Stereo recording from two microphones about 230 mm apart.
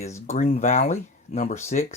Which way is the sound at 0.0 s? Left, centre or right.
Left.